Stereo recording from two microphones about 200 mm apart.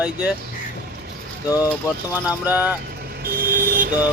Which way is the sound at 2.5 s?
5° right (ahead or behind).